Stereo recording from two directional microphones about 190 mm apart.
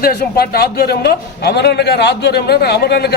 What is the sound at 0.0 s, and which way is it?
A man's voice, 55° left (ahead or behind).